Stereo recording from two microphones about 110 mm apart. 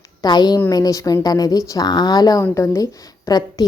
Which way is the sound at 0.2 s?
40° left (ahead or behind).